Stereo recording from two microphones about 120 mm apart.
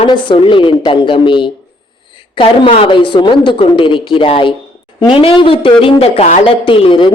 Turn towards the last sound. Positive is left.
turn(degrees=45)  # may be behind; listen again after turning